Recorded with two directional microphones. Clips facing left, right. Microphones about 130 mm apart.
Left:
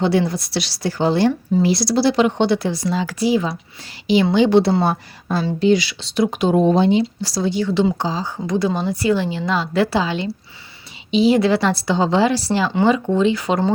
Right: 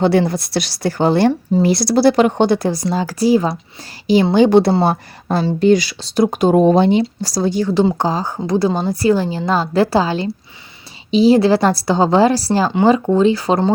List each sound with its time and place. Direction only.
0.0 s a woman's voice: 55° right (ahead or behind)
7.0 s speech: 40° right (ahead or behind)
8.4 s a woman's voice: 35° right (ahead or behind)